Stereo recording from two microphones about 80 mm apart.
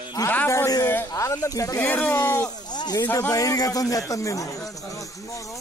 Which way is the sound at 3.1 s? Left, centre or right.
Left.